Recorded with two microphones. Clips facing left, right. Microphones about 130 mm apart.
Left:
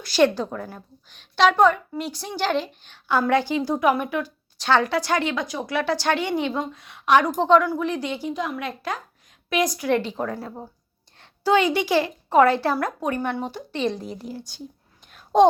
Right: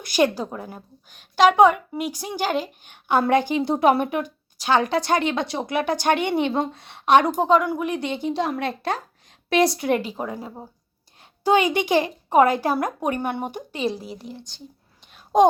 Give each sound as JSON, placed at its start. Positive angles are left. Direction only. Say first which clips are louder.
{"t": 0.0, "sound": "a woman's voice", "louder": "left 1 dB", "side_deg": -15}
{"t": 4.5, "sound": "speech", "louder": "even", "side_deg": -15}
{"t": 6.5, "sound": "speech", "louder": "right 3 dB", "side_deg": -30}
{"t": 7.3, "sound": "a woman's voice", "louder": "left 1 dB", "side_deg": -10}
{"t": 8.0, "sound": "speech", "louder": "right 3 dB", "side_deg": -25}
{"t": 10.0, "sound": "a woman's voice", "louder": "left 1 dB", "side_deg": -10}
{"t": 15.3, "sound": "a woman's voice", "louder": "even", "side_deg": -10}